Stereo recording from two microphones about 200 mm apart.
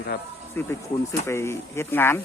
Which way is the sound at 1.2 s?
15° left (ahead or behind).